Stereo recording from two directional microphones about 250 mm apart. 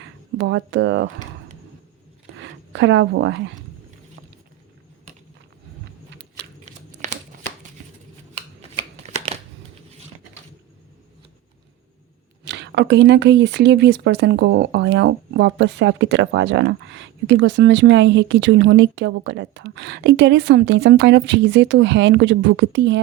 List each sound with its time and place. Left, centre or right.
0.0 s speech: right
2.4 s speech: right
7.0 s shuffling cards: right
9.1 s a sound: right
12.5 s speech: right